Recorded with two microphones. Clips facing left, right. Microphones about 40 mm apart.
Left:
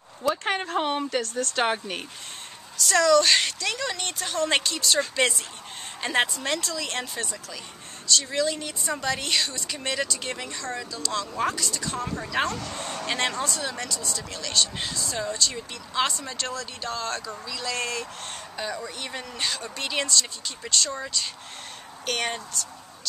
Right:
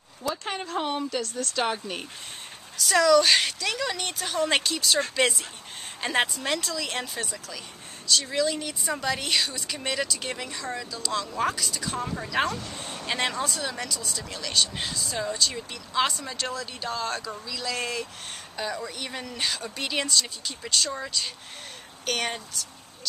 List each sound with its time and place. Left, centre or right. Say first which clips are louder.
0.2 s speech: left 5 dB; left
2.8 s speech: even; centre
12.5 s speech: left 3 dB; left
13.0 s speech: even; centre